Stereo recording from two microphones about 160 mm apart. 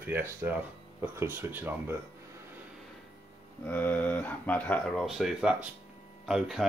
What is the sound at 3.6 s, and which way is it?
Speech, 10° left (ahead or behind).